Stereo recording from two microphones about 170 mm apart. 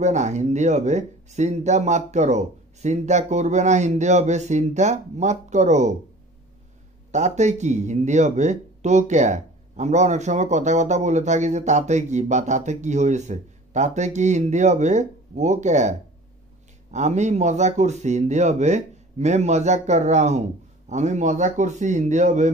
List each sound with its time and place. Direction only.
0.0 s speech: 45° right (ahead or behind)
7.1 s speech: 45° right (ahead or behind)